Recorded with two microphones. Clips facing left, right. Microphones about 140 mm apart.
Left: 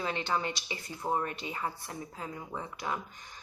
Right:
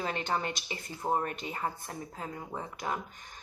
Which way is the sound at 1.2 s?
45° right (ahead or behind).